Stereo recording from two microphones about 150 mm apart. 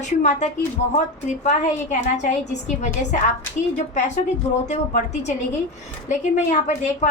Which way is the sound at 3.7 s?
50° left (ahead or behind).